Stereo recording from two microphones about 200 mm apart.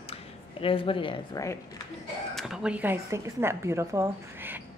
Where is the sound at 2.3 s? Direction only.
Centre (ahead or behind).